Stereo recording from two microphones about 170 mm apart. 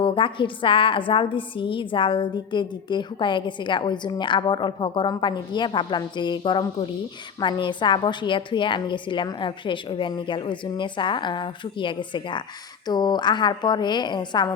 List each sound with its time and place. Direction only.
0.0 s a woman's voice: 30° left (ahead or behind)